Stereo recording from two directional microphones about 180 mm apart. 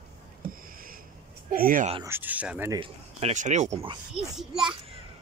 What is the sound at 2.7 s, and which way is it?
A man's voice, 30° right (ahead or behind).